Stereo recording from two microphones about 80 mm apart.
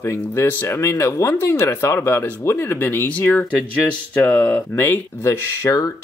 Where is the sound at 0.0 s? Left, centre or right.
Left.